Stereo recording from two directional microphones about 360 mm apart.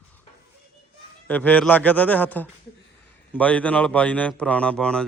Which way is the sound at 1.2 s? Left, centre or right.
Centre.